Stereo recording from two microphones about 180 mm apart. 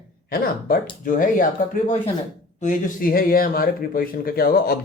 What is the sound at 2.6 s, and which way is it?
Speech, 45° left (ahead or behind).